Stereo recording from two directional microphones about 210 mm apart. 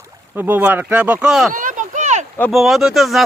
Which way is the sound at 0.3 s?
10° right (ahead or behind).